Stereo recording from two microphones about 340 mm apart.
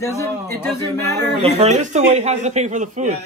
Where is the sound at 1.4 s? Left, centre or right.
Centre.